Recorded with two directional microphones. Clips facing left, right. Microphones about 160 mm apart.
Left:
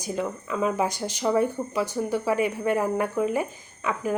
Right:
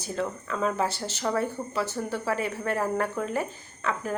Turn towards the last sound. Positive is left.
turn(degrees=10)  # may be behind; listen again after turning